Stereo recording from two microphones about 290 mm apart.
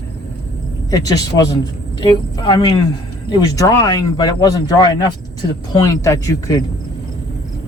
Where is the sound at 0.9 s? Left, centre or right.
Centre.